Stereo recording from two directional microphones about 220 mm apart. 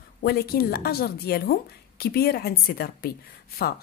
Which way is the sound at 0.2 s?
45° left (ahead or behind).